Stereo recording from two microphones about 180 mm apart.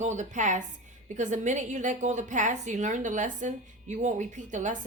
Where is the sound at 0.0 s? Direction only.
40° right (ahead or behind).